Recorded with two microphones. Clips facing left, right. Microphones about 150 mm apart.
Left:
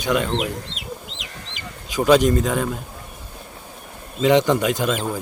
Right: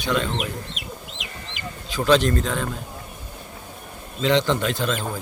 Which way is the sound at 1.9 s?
15° left (ahead or behind).